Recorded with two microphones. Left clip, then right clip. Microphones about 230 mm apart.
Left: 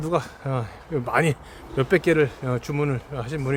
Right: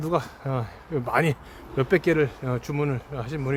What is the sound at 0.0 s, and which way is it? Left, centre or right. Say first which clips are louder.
A man's voice: left 1 dB; centre.